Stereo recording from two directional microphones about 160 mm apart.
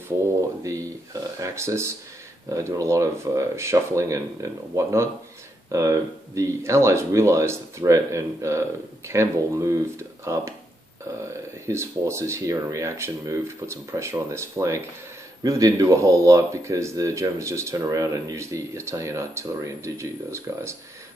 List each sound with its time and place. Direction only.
0.4 s speech: 20° right (ahead or behind)
11.6 s speech: 20° right (ahead or behind)